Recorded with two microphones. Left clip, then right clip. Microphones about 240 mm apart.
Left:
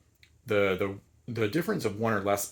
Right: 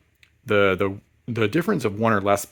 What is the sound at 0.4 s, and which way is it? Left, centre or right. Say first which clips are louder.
Speech: right 7 dB; right.